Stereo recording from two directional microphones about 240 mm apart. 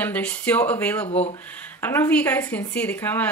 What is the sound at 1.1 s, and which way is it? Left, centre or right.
Speech, left.